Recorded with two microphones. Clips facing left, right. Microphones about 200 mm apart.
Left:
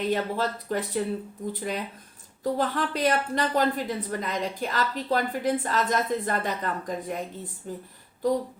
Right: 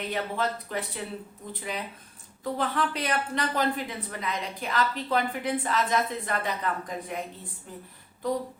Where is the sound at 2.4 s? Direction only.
40° left (ahead or behind).